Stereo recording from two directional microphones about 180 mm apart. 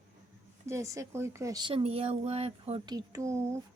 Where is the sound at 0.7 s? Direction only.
15° right (ahead or behind); by 2.8 s 35° right (ahead or behind).